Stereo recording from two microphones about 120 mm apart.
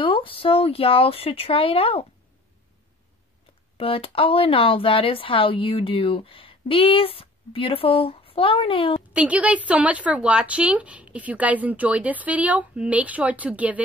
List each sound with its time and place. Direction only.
0.0 s speech: 50° left (ahead or behind)
3.7 s speech: 50° left (ahead or behind)
9.1 s a woman's voice: 10° right (ahead or behind)